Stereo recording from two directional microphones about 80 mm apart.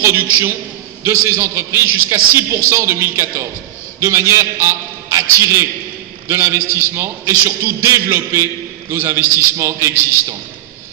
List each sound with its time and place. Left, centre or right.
0.0 s a man's voice: right